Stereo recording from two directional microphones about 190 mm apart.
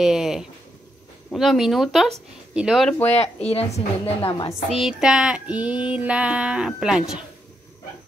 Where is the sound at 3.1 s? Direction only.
35° left (ahead or behind).